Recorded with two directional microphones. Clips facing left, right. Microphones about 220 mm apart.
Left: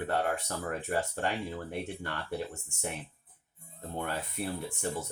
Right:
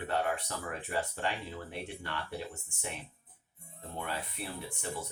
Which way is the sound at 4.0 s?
50° left (ahead or behind).